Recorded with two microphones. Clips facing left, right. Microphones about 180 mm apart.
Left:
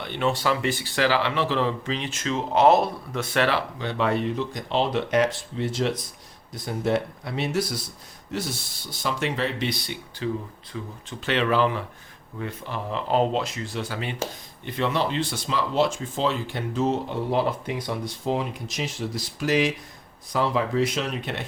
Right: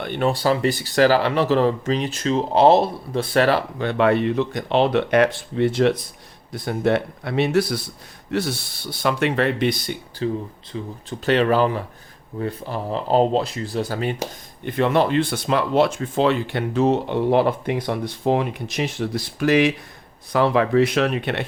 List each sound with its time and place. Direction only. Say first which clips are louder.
0.0 s speech: right 4 dB; 45° right (ahead or behind)
10.7 s speech: right 4 dB; 30° right (ahead or behind)
11.3 s speech: right 5 dB; 40° right (ahead or behind)
14.6 s speech: right 6 dB; 55° right (ahead or behind)